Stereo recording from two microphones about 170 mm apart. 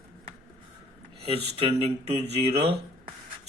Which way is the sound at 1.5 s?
35° right (ahead or behind).